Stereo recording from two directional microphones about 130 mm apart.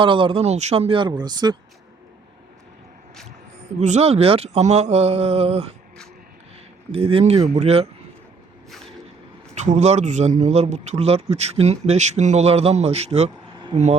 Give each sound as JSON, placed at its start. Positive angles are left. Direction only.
{"t": 0.0, "sound": "speech", "side_deg": -40}
{"t": 3.8, "sound": "speech", "side_deg": -65}
{"t": 6.9, "sound": "speech", "side_deg": -45}
{"t": 9.6, "sound": "a man's voice", "side_deg": -60}